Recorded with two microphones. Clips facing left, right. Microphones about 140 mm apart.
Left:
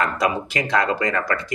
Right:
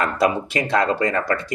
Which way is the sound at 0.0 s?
30° right (ahead or behind).